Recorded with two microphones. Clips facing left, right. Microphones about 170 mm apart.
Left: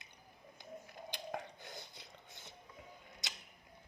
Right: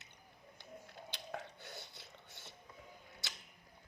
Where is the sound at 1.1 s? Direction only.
15° left (ahead or behind).